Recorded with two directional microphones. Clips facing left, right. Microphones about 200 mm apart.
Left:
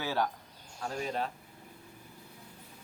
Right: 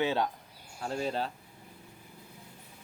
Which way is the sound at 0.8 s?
30° right (ahead or behind).